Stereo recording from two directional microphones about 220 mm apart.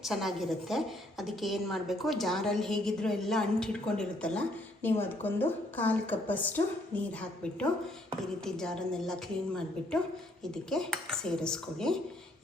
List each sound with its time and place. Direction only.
0.0 s a woman's voice: centre (ahead or behind)